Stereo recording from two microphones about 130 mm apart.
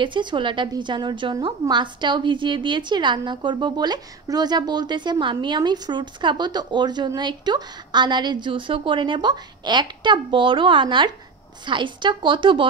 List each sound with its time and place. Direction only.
0.0 s a woman's voice: 35° right (ahead or behind)